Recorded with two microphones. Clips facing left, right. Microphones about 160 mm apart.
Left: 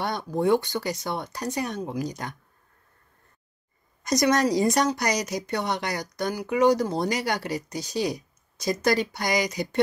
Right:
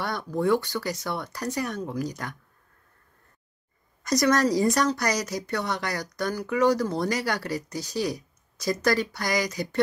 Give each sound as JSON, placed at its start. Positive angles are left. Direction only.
{"t": 0.0, "sound": "speech", "side_deg": 20}
{"t": 4.0, "sound": "speech", "side_deg": 20}